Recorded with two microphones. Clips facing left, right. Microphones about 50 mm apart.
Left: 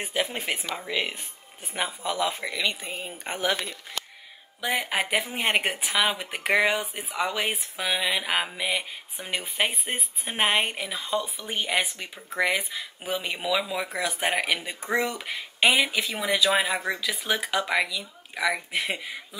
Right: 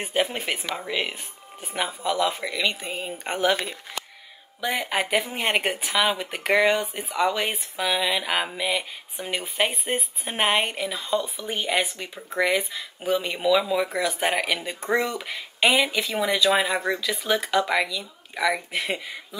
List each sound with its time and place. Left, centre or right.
0.2 s speech: right
0.7 s speech: centre
2.4 s speech: centre
2.9 s speech: right
4.6 s speech: centre